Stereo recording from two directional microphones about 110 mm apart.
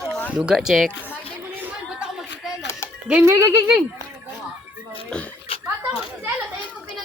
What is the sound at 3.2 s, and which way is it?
Speech, 25° right (ahead or behind).